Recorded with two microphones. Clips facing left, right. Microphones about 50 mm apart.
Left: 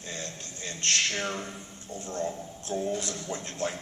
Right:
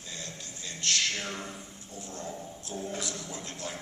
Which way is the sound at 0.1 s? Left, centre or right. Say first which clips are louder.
Left 4 dB; left.